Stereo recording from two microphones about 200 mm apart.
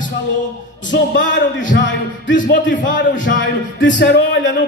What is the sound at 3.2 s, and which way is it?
Speech, 70° left (ahead or behind).